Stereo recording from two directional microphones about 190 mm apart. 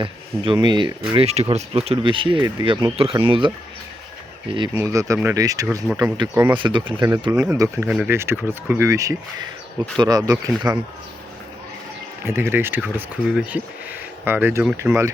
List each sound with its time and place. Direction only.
0.0 s speech: 25° right (ahead or behind)
4.8 s speech: 15° right (ahead or behind)
6.5 s speech: 25° right (ahead or behind)
12.2 s speech: 10° right (ahead or behind)